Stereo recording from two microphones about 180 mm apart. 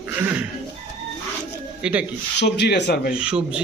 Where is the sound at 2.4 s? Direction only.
70° left (ahead or behind).